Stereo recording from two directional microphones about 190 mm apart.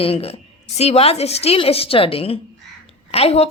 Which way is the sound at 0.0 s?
30° left (ahead or behind).